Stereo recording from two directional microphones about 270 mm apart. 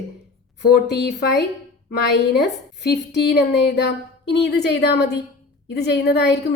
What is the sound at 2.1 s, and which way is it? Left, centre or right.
A woman's voice, left.